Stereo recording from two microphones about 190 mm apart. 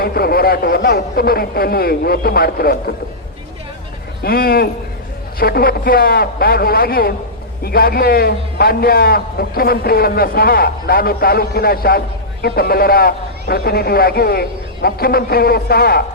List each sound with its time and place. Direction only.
0.0 s a man's voice: 55° left (ahead or behind)
4.2 s a man's voice: 50° left (ahead or behind)